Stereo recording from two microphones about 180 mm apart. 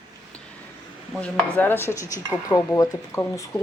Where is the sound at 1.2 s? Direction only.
10° left (ahead or behind).